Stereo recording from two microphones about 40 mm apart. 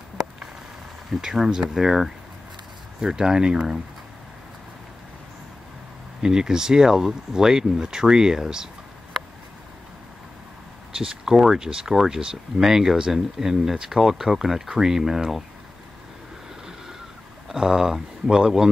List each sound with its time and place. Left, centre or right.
1.2 s speech: centre
3.0 s speech: centre
6.2 s speech: centre
11.0 s speech: centre
17.5 s speech: centre